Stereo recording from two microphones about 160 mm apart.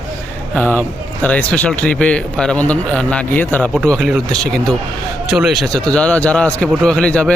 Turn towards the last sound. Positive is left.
turn(degrees=5)  # may be behind; listen again after turning